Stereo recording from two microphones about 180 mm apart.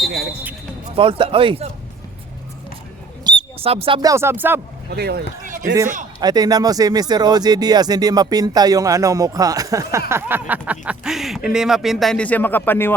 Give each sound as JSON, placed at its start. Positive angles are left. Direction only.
{"t": 0.1, "sound": "basketball bounce", "side_deg": -60}
{"t": 0.9, "sound": "speech", "side_deg": -30}
{"t": 3.2, "sound": "a sound", "side_deg": -30}
{"t": 4.1, "sound": "speech", "side_deg": -15}
{"t": 4.9, "sound": "speech", "side_deg": -65}
{"t": 6.1, "sound": "speech", "side_deg": -20}